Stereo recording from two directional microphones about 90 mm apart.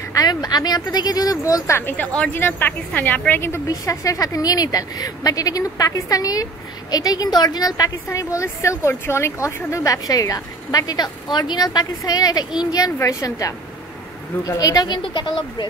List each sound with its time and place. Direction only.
0.1 s a woman's voice: 45° left (ahead or behind); by 2.0 s 25° left (ahead or behind)
2.1 s speech: 10° left (ahead or behind)
2.4 s a woman's voice: 20° left (ahead or behind)
3.6 s a woman's voice: 40° left (ahead or behind)
15.0 s speech: 60° left (ahead or behind)